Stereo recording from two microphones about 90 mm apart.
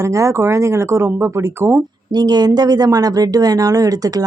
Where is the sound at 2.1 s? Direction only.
50° right (ahead or behind).